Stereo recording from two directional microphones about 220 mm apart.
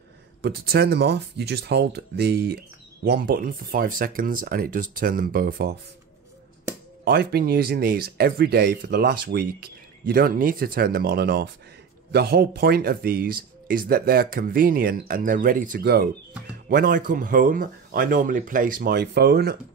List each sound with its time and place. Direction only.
0.4 s speech: 45° right (ahead or behind)
7.1 s speech: 45° right (ahead or behind)